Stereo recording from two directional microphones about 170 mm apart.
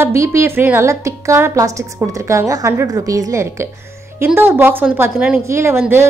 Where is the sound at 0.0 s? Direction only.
15° right (ahead or behind).